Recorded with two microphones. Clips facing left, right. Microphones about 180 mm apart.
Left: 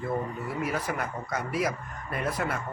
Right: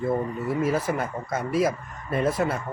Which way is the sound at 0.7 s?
25° right (ahead or behind).